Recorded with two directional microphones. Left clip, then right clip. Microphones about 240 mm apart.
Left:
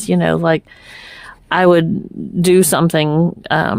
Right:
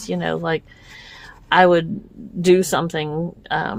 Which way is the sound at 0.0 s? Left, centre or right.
Left.